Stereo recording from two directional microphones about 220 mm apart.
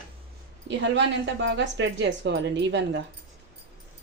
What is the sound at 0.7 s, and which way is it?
Speech, 55° right (ahead or behind).